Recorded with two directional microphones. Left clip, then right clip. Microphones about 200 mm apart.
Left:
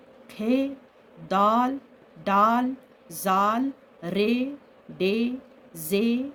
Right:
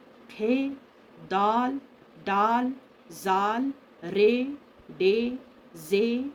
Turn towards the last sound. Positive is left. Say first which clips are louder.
# even
turn(degrees=60)  # may be behind; listen again after turning